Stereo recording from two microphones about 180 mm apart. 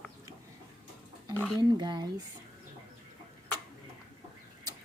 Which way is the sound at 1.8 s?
25° right (ahead or behind).